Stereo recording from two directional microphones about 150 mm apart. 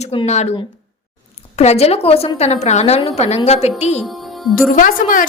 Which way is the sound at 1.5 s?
45° left (ahead or behind).